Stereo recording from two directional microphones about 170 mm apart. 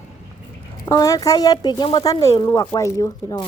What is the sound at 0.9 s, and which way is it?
A woman's voice, 20° left (ahead or behind).